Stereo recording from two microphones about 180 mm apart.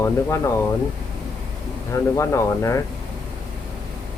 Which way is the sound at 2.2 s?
15° left (ahead or behind).